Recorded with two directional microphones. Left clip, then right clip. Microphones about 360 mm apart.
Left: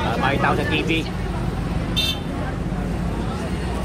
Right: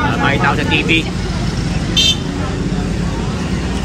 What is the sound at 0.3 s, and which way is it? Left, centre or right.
Speech, left.